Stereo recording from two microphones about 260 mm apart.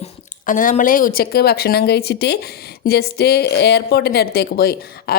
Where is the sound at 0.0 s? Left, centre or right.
Left.